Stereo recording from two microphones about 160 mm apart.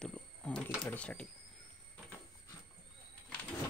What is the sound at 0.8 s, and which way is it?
Speech, 10° left (ahead or behind).